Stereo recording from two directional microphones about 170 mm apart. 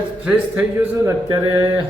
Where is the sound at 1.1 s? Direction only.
20° right (ahead or behind).